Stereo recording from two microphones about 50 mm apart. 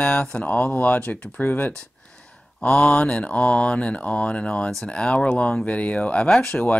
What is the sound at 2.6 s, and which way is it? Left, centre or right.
Speech, left.